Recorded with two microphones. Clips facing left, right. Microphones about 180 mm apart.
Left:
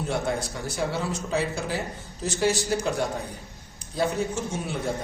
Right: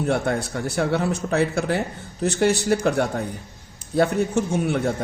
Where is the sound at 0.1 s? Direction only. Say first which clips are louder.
Right 3 dB; 60° right (ahead or behind).